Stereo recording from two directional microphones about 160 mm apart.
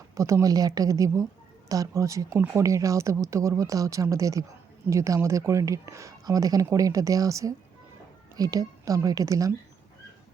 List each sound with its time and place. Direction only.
0.1 s speech: 20° right (ahead or behind)